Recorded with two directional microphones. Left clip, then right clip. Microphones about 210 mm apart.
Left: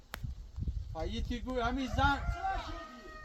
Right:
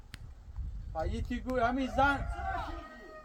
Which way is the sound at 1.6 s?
15° right (ahead or behind).